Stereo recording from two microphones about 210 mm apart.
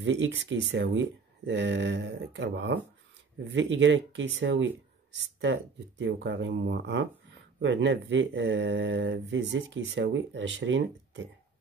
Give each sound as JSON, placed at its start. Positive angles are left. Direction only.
{"t": 0.0, "sound": "speech", "side_deg": -60}